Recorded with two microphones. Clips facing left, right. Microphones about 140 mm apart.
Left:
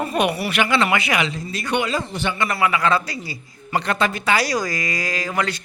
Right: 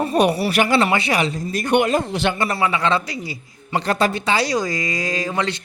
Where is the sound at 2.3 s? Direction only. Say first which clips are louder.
Even; 30° right (ahead or behind).